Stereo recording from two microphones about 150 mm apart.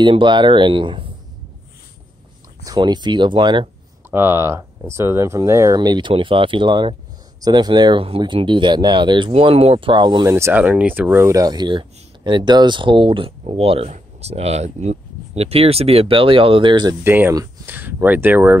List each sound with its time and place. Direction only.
0.0 s speech: 35° right (ahead or behind)
2.6 s speech: 25° right (ahead or behind)
4.1 s speech: 15° right (ahead or behind); by 10.2 s 30° right (ahead or behind)
10.2 s speech: 15° right (ahead or behind)
17.0 s speech: 15° right (ahead or behind)